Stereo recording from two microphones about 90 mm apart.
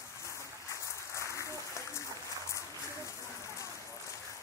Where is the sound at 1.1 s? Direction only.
35° left (ahead or behind).